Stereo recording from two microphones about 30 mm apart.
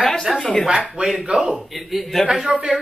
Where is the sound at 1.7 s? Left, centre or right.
Centre.